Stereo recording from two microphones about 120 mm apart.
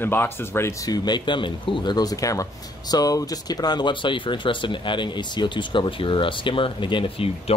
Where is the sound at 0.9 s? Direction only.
40° left (ahead or behind).